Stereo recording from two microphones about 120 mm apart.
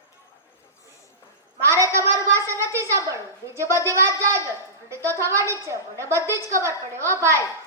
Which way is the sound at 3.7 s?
25° right (ahead or behind).